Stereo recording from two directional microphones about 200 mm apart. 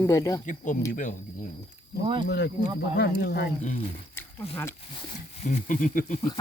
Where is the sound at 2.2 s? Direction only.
60° left (ahead or behind).